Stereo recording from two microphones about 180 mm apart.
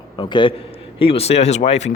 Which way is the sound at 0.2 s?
25° left (ahead or behind).